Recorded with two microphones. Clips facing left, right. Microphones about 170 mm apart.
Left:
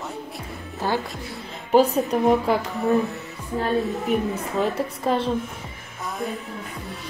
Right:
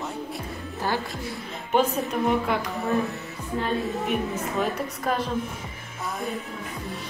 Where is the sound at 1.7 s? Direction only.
35° left (ahead or behind).